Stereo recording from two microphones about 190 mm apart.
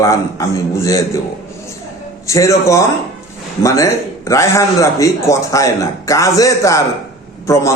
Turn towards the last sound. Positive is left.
turn(degrees=15)  # may be behind; listen again after turning